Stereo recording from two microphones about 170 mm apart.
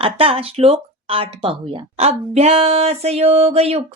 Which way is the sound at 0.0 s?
35° right (ahead or behind).